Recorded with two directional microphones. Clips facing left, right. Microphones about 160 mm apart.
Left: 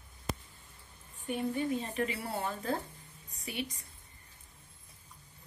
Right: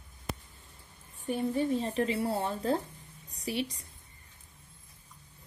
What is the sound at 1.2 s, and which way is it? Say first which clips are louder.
Speech: right 3 dB; 35° right (ahead or behind).